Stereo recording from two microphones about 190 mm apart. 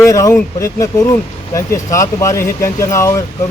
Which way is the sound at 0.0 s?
15° left (ahead or behind).